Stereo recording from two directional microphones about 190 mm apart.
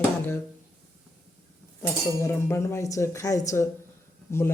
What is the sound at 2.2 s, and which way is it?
Speech, 15° left (ahead or behind).